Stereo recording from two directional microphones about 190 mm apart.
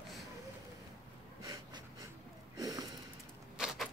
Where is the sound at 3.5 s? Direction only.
5° right (ahead or behind).